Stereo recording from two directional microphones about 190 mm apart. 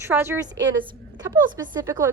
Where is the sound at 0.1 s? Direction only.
10° right (ahead or behind).